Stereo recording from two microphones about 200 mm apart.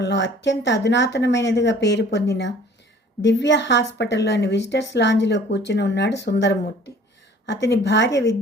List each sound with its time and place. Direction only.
0.0 s speech: 60° left (ahead or behind)